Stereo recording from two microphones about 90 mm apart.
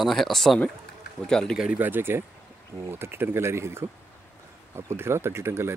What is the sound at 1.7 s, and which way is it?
Speech, 20° right (ahead or behind).